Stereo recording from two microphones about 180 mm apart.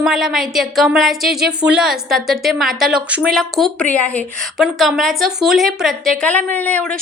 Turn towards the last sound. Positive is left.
turn(degrees=5)  # may be behind; listen again after turning